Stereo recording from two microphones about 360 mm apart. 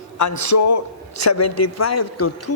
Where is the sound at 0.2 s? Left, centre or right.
Left.